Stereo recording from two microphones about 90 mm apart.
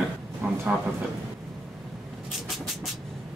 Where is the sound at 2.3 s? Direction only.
Centre (ahead or behind).